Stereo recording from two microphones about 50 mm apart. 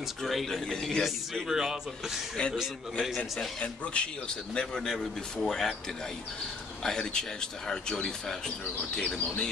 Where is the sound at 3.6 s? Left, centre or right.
Left; by 5.7 s centre.